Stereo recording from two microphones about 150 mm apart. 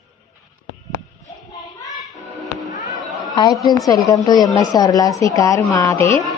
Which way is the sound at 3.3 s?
25° left (ahead or behind).